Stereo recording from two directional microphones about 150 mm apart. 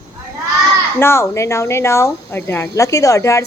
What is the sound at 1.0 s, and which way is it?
Speech, 15° left (ahead or behind).